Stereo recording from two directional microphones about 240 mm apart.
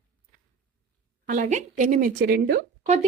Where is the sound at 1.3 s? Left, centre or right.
Right.